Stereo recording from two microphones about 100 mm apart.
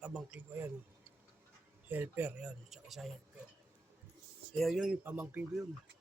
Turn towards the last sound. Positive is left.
turn(degrees=-15)  # may be behind; listen again after turning